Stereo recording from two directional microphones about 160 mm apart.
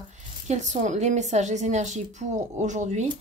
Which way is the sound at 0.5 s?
45° right (ahead or behind).